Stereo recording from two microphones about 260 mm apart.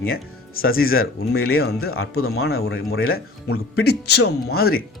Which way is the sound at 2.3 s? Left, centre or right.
Left.